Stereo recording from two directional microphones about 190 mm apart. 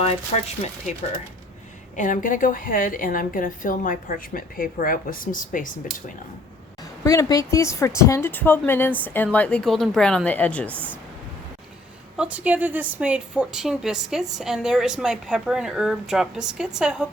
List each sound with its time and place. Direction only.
0.3 s speech: 35° left (ahead or behind)
2.0 s a woman's voice: 45° left (ahead or behind)
7.0 s a woman's voice: 15° left (ahead or behind)
12.1 s speech: 5° right (ahead or behind)